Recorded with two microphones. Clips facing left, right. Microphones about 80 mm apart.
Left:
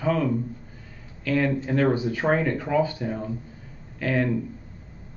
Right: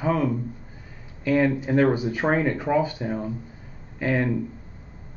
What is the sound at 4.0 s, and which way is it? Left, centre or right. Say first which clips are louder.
Speech: right 1 dB; right.